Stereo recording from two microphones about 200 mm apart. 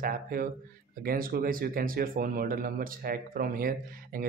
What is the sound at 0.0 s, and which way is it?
Speech, 45° right (ahead or behind).